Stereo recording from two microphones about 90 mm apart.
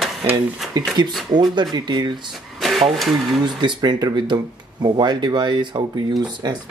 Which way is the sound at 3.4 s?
55° right (ahead or behind).